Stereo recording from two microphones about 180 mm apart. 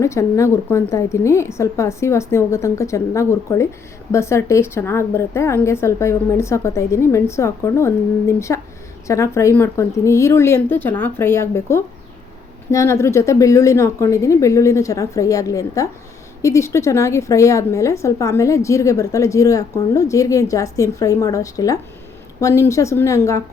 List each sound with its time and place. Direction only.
0.0 s a woman's voice: 15° left (ahead or behind)